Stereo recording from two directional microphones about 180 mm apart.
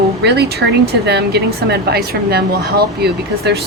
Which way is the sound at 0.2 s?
65° right (ahead or behind).